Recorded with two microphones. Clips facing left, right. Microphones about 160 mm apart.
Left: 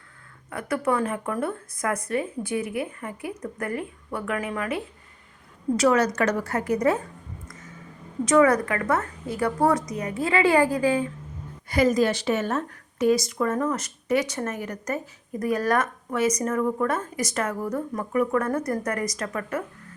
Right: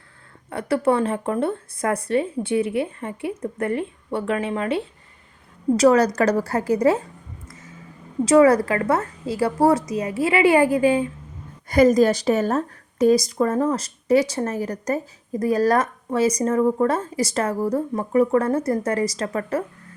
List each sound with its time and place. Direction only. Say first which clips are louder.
0.5 s speech: right 5 dB; 30° right (ahead or behind)
5.7 s speech: right 5 dB; 35° right (ahead or behind)
8.2 s speech: right 4 dB; 30° right (ahead or behind)
10.2 s speech: right 3 dB; 15° right (ahead or behind)
11.7 s speech: right 6 dB; 45° right (ahead or behind)